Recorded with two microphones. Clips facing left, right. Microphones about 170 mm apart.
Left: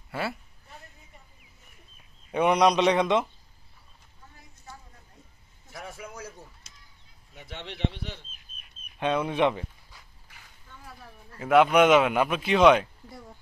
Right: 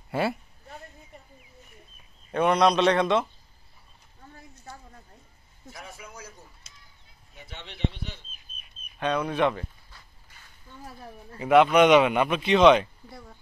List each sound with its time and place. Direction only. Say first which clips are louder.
0.1 s a woman's voice: right 5 dB; 20° right (ahead or behind)
2.3 s a man's voice: even; 15° left (ahead or behind)
5.7 s a sound: left 3 dB; 55° left (ahead or behind)
7.3 s speech: left 4 dB; 65° left (ahead or behind)
9.0 s dog: even; 20° left (ahead or behind)
11.3 s speech: right 1 dB; centre (ahead or behind)